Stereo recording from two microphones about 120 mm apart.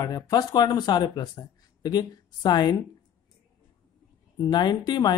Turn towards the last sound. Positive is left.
turn(degrees=35)  # may be behind; listen again after turning